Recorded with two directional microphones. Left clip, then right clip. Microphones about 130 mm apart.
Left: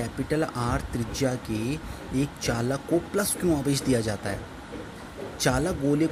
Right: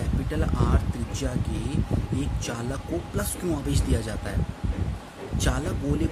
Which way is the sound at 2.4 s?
25° left (ahead or behind).